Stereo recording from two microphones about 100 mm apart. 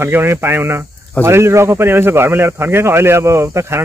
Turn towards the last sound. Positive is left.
turn(degrees=-25)  # may be behind; listen again after turning